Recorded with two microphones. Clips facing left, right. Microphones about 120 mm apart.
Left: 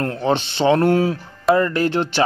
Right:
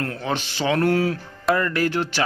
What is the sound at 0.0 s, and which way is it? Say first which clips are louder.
Speech: left 6 dB; 30° left (ahead or behind).